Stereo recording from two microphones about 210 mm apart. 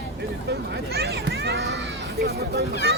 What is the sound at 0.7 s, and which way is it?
Children playing, 50° right (ahead or behind).